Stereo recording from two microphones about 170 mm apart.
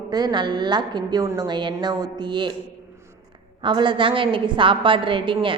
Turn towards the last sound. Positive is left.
turn(degrees=-30)  # may be behind; listen again after turning